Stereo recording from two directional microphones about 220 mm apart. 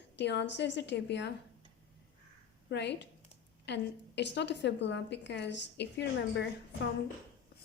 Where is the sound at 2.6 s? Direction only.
50° left (ahead or behind).